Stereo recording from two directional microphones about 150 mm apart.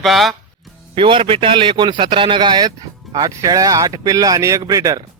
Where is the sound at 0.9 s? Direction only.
35° right (ahead or behind).